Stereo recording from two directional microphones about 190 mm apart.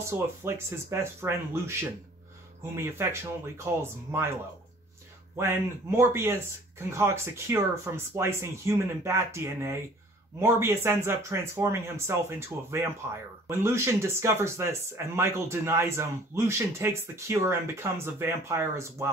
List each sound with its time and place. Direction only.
0.1 s speech: 15° right (ahead or behind)
5.4 s speech: 15° right (ahead or behind)